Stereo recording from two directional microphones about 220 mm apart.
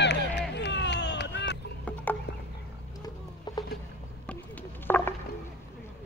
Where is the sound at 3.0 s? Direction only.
15° left (ahead or behind).